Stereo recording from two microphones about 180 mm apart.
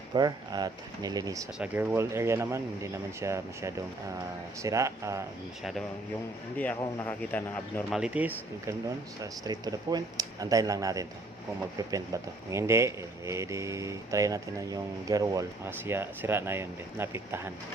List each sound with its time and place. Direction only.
0.1 s speech: 20° right (ahead or behind)
1.5 s speech: 10° right (ahead or behind)
6.7 s speech: 20° left (ahead or behind)
7.9 s speech: 5° right (ahead or behind)
9.2 s speech: 20° right (ahead or behind)